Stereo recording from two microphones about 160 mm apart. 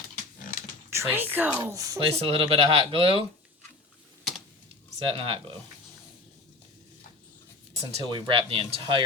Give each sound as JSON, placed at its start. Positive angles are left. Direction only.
{"t": 0.9, "sound": "speech", "side_deg": -15}
{"t": 2.0, "sound": "speech", "side_deg": -35}
{"t": 4.2, "sound": "typing", "side_deg": 0}
{"t": 4.9, "sound": "speech", "side_deg": -35}
{"t": 7.9, "sound": "speech", "side_deg": -35}